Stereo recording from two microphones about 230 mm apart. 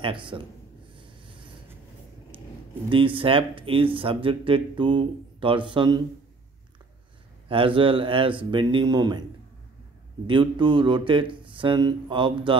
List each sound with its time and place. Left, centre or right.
0.0 s speech: right
0.9 s a sound: right
2.9 s speech: right
7.4 s speech: right
10.2 s speech: right